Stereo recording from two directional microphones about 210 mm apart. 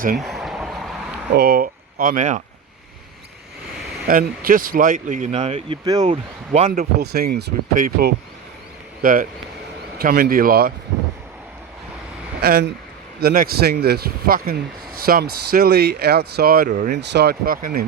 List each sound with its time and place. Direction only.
0.2 s a sound: centre (ahead or behind)
1.3 s speech: 50° right (ahead or behind)
4.1 s speech: 45° right (ahead or behind); by 6.1 s 20° right (ahead or behind)
6.1 s speech: 35° right (ahead or behind)
7.0 s speech: 45° right (ahead or behind)
12.4 s speech: 50° right (ahead or behind)
17.0 s speech: 55° right (ahead or behind)